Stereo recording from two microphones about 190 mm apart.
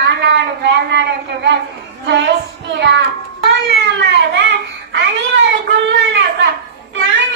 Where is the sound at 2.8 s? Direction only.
65° right (ahead or behind).